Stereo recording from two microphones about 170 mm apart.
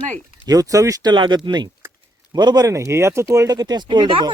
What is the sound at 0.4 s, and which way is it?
Speech, 20° right (ahead or behind).